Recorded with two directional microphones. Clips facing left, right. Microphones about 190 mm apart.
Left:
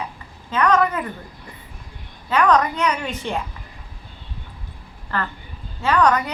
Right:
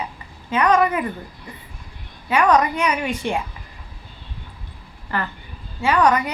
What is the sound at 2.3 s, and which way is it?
A woman's voice, 10° right (ahead or behind).